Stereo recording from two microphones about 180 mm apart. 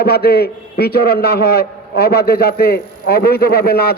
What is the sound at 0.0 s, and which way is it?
A man's voice, 60° left (ahead or behind).